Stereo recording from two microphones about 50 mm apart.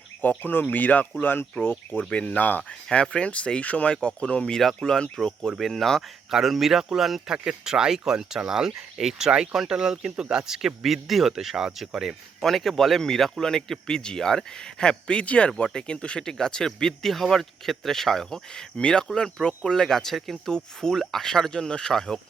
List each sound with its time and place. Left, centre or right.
0.2 s speech: left
2.0 s speech: left
2.9 s speech: centre
6.3 s speech: centre
12.4 s speech: centre